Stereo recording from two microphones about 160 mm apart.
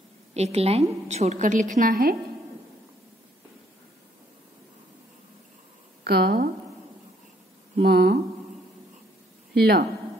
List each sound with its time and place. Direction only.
0.3 s a woman's voice: 40° right (ahead or behind); by 2.1 s 60° right (ahead or behind)
6.0 s a woman's voice: 80° right
7.8 s a sound: 80° right
9.5 s speech: 80° right